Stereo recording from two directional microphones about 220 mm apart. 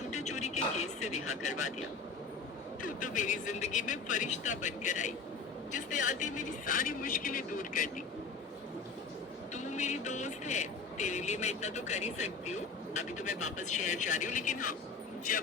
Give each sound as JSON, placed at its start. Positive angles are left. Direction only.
{"t": 0.1, "sound": "speech", "side_deg": 30}
{"t": 2.8, "sound": "speech", "side_deg": 35}
{"t": 9.6, "sound": "speech", "side_deg": 30}